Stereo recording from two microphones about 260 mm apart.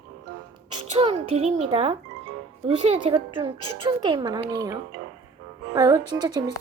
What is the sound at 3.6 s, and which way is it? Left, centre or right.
Speech, left.